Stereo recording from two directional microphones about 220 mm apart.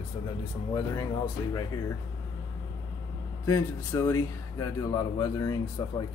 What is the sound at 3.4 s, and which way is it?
Speech, 15° left (ahead or behind).